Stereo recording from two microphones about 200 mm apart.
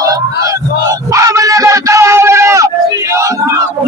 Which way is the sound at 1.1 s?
15° right (ahead or behind).